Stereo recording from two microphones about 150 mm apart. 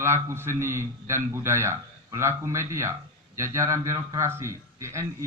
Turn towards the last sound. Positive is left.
turn(degrees=-20)  # may be behind; listen again after turning